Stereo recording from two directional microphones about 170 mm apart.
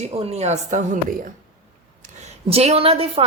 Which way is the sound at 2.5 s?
35° right (ahead or behind).